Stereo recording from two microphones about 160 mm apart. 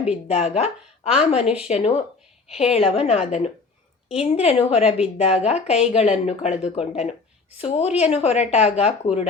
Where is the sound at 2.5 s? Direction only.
40° left (ahead or behind).